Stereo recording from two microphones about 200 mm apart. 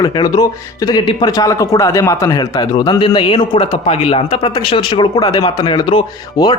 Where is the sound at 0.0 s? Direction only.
20° left (ahead or behind).